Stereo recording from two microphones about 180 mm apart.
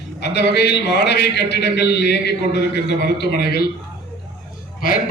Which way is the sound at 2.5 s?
70° left (ahead or behind).